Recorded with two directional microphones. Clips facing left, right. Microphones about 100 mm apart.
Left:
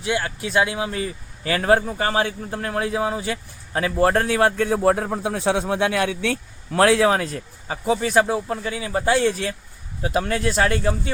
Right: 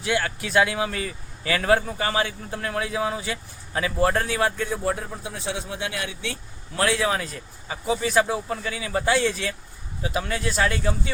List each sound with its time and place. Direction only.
0.0 s a man's voice: 25° left (ahead or behind)
9.1 s speech: 40° left (ahead or behind)